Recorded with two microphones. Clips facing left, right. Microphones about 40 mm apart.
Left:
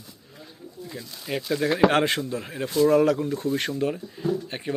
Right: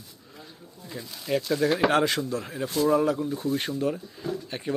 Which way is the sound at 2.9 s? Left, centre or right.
Left.